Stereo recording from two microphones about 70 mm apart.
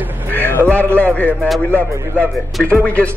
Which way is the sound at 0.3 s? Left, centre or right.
Left.